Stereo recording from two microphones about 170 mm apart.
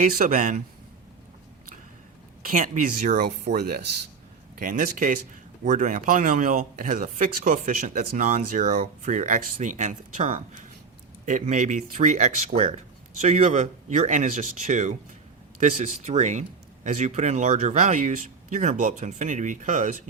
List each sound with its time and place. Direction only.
0.0 s speech: 55° right (ahead or behind)
2.4 s speech: 50° right (ahead or behind)
3.4 s speech: 65° right (ahead or behind)
4.6 s speech: 50° right (ahead or behind)